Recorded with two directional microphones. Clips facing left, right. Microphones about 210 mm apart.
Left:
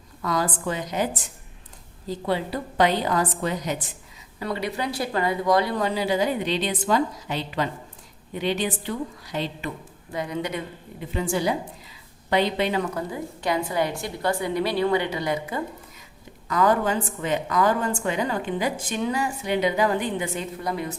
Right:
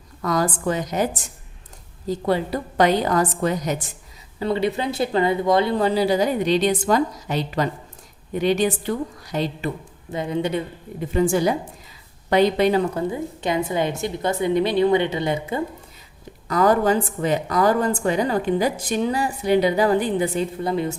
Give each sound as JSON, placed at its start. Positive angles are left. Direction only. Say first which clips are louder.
{"t": 0.2, "sound": "a woman's voice", "louder": "right 4 dB", "side_deg": -45}
{"t": 4.4, "sound": "a woman's voice", "louder": "right 6 dB", "side_deg": -25}
{"t": 10.1, "sound": "a woman's voice", "louder": "right 5 dB", "side_deg": -25}
{"t": 11.1, "sound": "a woman's voice", "louder": "right 5 dB", "side_deg": -45}
{"t": 12.9, "sound": "a woman's voice", "louder": "right 5 dB", "side_deg": -25}
{"t": 16.5, "sound": "a woman's voice", "louder": "right 4 dB", "side_deg": -35}